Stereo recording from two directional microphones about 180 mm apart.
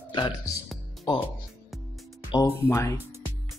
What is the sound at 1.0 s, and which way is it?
Speech, 25° left (ahead or behind).